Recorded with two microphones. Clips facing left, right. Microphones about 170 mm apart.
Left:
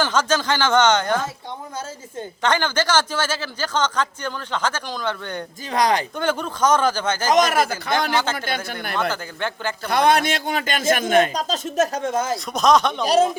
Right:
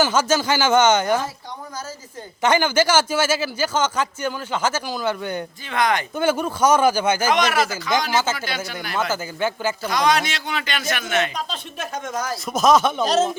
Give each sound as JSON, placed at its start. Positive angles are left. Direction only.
{"t": 0.0, "sound": "a man's voice", "side_deg": -10}
{"t": 2.4, "sound": "a man's voice", "side_deg": -10}
{"t": 5.7, "sound": "speech", "side_deg": 35}
{"t": 6.1, "sound": "a man's voice", "side_deg": -5}
{"t": 7.3, "sound": "speech", "side_deg": 45}
{"t": 8.1, "sound": "speech", "side_deg": -5}
{"t": 8.4, "sound": "speech", "side_deg": 55}
{"t": 9.0, "sound": "speech", "side_deg": -5}
{"t": 9.9, "sound": "speech", "side_deg": 55}
{"t": 12.5, "sound": "speech", "side_deg": -5}